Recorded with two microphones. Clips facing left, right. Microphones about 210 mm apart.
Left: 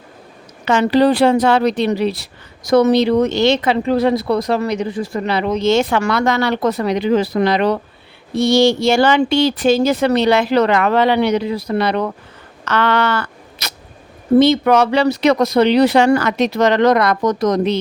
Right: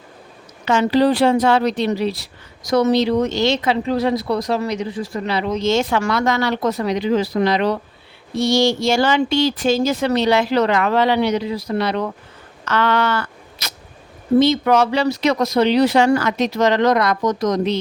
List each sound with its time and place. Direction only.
0.6 s speech: 65° left (ahead or behind)
12.6 s a sound: 70° left (ahead or behind)
14.3 s speech: 65° left (ahead or behind)